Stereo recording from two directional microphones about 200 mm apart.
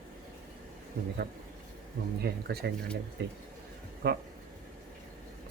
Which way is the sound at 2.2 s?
50° right (ahead or behind).